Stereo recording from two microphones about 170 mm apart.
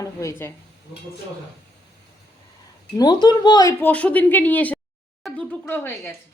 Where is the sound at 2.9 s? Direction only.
25° left (ahead or behind).